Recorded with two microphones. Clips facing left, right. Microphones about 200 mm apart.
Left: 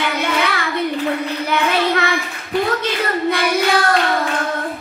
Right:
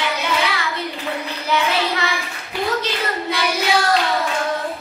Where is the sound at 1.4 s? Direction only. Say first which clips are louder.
Left 1 dB; 55° left (ahead or behind).